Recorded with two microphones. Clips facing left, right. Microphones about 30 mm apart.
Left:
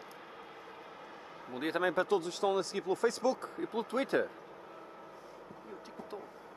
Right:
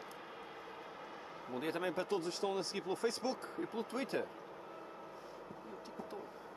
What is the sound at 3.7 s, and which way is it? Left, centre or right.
Speech, left.